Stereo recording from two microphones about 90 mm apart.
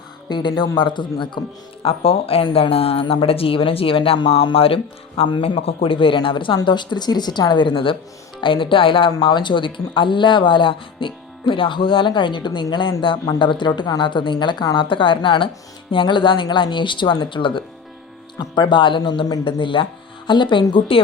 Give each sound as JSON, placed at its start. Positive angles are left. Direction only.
{"t": 0.3, "sound": "speech", "side_deg": 55}
{"t": 1.8, "sound": "speech", "side_deg": 90}
{"t": 6.7, "sound": "speech", "side_deg": 55}
{"t": 14.8, "sound": "speech", "side_deg": 70}
{"t": 18.3, "sound": "speech", "side_deg": 55}
{"t": 19.5, "sound": "speech", "side_deg": 70}